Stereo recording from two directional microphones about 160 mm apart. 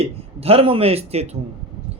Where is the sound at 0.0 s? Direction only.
40° right (ahead or behind).